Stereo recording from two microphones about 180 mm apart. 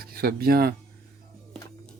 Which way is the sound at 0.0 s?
55° right (ahead or behind).